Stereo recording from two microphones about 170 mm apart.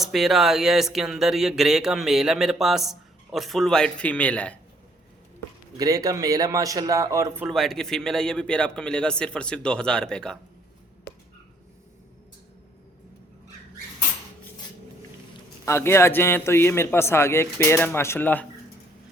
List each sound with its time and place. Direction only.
0.0 s speech: centre (ahead or behind)
5.7 s a man's voice: 20° right (ahead or behind)
7.4 s speech: centre (ahead or behind)
11.1 s a sound: 10° left (ahead or behind)
15.6 s a man's voice: 15° left (ahead or behind)